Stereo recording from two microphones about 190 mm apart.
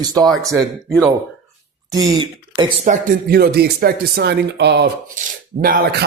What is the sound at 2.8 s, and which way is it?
Speech, 40° right (ahead or behind).